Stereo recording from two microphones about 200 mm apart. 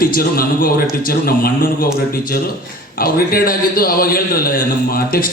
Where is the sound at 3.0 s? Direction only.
45° left (ahead or behind).